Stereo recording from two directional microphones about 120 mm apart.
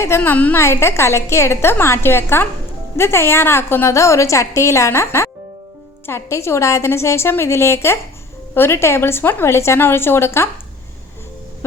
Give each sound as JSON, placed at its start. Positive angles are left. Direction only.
{"t": 0.2, "sound": "a woman's voice", "side_deg": 15}